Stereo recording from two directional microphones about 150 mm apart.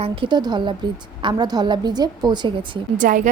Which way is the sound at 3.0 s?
60° right (ahead or behind).